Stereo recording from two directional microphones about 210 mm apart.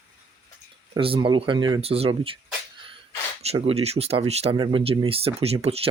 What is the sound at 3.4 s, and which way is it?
Speech, 30° right (ahead or behind).